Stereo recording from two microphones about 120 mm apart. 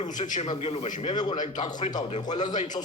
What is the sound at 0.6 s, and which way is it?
Speech, 55° left (ahead or behind).